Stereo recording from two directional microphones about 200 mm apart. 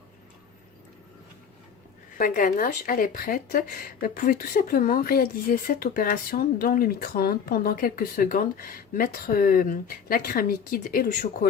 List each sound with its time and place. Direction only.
2.1 s speech: 45° left (ahead or behind)